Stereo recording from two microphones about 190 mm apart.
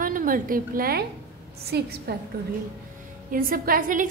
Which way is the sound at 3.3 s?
50° right (ahead or behind).